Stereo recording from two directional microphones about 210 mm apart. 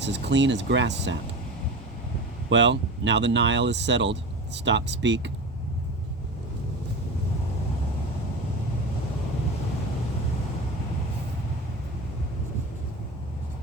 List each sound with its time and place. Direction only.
0.0 s speech: 55° right (ahead or behind)
2.5 s speech: 60° right (ahead or behind)